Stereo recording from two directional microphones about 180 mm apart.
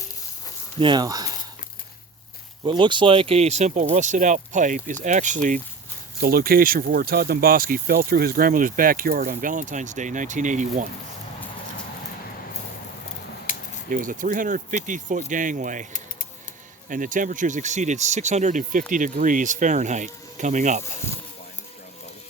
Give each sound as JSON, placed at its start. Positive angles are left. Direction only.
{"t": 0.8, "sound": "speech", "side_deg": -25}
{"t": 2.6, "sound": "speech", "side_deg": -25}
{"t": 13.9, "sound": "speech", "side_deg": -50}
{"t": 16.9, "sound": "speech", "side_deg": -45}